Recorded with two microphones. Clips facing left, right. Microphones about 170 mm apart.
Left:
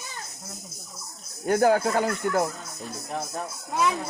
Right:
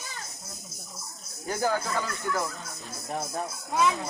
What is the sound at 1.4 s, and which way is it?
Speech, 65° left (ahead or behind).